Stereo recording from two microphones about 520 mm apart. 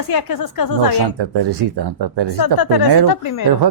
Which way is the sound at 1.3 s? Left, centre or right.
Right.